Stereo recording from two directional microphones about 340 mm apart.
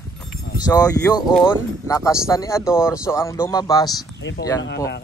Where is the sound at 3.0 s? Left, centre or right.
Centre.